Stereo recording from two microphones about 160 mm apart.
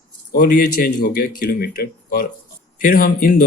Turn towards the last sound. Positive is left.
turn(degrees=65)  # may be behind; listen again after turning